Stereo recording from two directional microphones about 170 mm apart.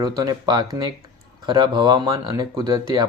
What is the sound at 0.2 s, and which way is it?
Speech, 25° right (ahead or behind).